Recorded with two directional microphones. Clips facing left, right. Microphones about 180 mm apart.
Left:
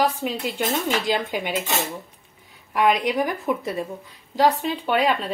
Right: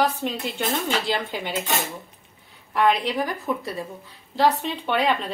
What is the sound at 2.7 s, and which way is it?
Speech, 15° left (ahead or behind).